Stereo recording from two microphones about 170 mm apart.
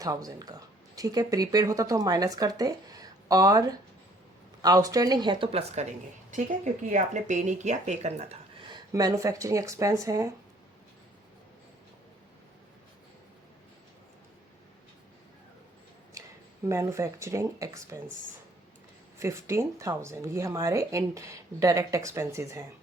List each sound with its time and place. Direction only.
0.0 s speech: 20° right (ahead or behind)
6.9 s speech: 45° right (ahead or behind)
8.7 s speech: 20° right (ahead or behind)
16.6 s speech: 15° right (ahead or behind)
19.2 s speech: 15° right (ahead or behind)